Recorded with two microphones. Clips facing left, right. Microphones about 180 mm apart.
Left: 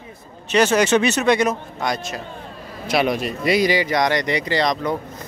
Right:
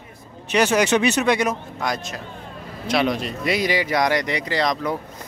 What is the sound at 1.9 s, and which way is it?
Speech, centre (ahead or behind).